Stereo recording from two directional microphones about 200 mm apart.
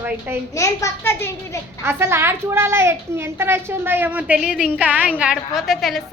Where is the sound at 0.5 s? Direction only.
15° left (ahead or behind).